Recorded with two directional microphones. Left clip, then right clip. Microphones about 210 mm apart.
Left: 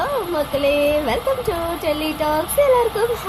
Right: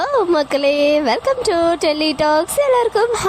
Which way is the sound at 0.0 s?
40° right (ahead or behind).